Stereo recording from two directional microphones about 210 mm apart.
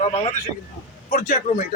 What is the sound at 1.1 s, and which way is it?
Speech, 40° left (ahead or behind).